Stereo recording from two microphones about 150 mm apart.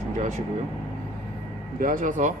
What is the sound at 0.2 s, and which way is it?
Speech, 50° right (ahead or behind).